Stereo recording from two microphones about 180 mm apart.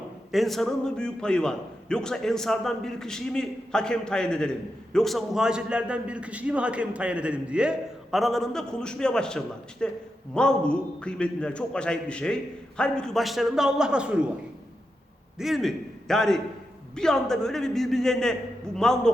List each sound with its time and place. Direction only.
0.3 s a man's voice: centre (ahead or behind)
15.4 s a man's voice: centre (ahead or behind)